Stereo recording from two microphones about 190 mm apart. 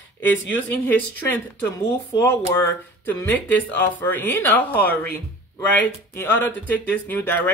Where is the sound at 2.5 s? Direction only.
10° left (ahead or behind).